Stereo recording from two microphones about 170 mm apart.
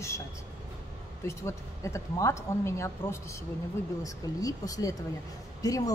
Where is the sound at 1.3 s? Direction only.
15° left (ahead or behind).